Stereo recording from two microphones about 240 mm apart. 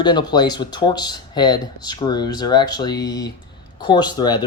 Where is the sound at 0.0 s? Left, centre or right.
Centre.